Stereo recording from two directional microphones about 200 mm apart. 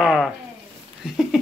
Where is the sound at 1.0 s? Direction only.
Centre (ahead or behind).